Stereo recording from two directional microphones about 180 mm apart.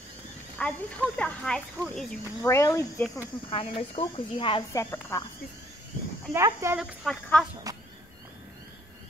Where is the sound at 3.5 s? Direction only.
30° left (ahead or behind).